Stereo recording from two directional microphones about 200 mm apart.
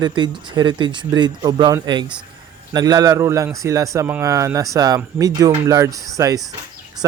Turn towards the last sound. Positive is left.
turn(degrees=-15)  # may be behind; listen again after turning